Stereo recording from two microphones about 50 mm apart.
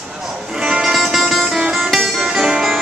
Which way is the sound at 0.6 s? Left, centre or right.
Centre.